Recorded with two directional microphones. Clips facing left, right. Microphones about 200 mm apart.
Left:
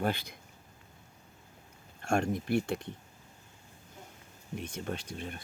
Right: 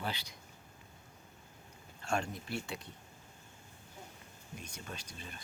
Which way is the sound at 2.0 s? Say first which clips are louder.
Left 7 dB; 50° left (ahead or behind).